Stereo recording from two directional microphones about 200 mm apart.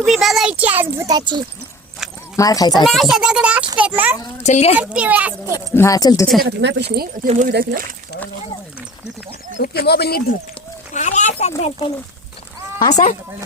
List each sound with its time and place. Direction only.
0.0 s a child's voice: centre (ahead or behind); by 1.4 s 20° right (ahead or behind)
2.3 s speech: 15° left (ahead or behind)
2.8 s a child's voice: centre (ahead or behind)
4.4 s a child's voice: 30° left (ahead or behind)
4.8 s speech: 5° right (ahead or behind)
5.5 s speech: 15° left (ahead or behind)
6.4 s speech: 60° right (ahead or behind)
7.3 s speech: 40° right (ahead or behind)
9.6 s speech: 50° left (ahead or behind)
10.9 s a child's voice: 35° left (ahead or behind)